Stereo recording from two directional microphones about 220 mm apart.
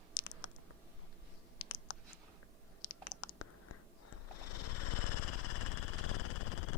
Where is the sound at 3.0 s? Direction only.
90° left.